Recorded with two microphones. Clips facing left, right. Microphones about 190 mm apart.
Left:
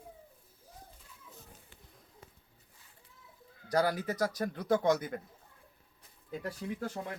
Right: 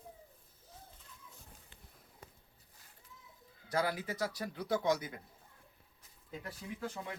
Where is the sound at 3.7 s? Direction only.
40° left (ahead or behind).